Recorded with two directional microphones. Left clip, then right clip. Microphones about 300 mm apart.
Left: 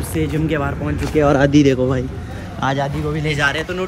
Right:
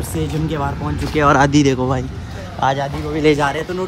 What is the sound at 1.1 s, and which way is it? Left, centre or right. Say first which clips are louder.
Speech: right 1 dB; right.